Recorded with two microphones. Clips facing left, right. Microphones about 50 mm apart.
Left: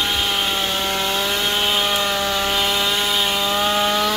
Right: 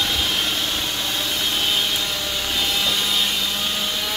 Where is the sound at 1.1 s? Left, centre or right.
Left.